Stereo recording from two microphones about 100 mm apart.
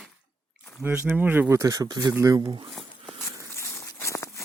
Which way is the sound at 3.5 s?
30° left (ahead or behind).